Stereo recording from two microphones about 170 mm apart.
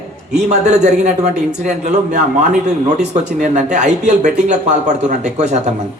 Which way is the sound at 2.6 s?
45° right (ahead or behind).